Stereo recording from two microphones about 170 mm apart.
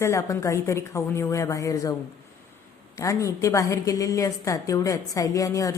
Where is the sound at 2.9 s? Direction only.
20° left (ahead or behind).